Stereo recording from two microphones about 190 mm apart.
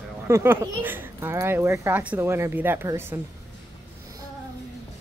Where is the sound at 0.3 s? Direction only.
10° right (ahead or behind).